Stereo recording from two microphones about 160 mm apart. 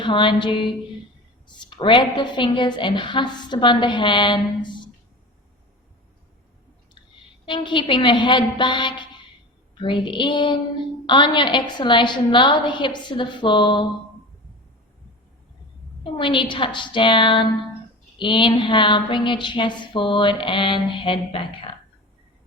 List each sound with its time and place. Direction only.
0.0 s a woman's voice: 30° left (ahead or behind)
7.4 s a woman's voice: 30° left (ahead or behind)
16.1 s a woman's voice: 30° left (ahead or behind)